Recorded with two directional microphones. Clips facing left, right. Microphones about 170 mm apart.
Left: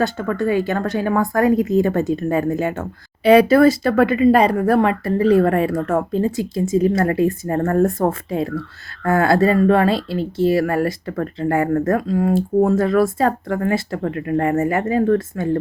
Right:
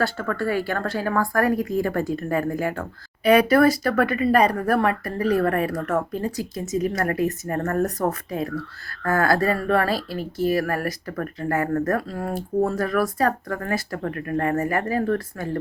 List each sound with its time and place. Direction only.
0.0 s speech: 20° left (ahead or behind)